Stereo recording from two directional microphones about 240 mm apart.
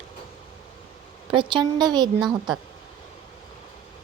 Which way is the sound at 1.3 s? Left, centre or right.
Centre.